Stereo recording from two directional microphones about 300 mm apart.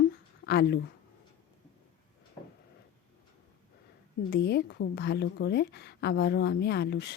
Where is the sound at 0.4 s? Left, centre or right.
Left.